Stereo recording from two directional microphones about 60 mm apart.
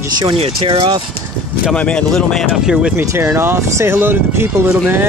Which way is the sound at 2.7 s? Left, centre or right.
Centre.